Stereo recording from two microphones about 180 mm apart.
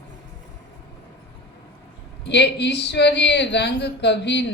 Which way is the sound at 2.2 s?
70° left (ahead or behind).